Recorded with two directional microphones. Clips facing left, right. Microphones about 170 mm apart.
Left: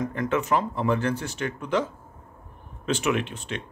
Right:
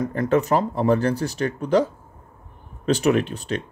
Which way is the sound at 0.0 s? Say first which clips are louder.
Right 5 dB; 35° right (ahead or behind).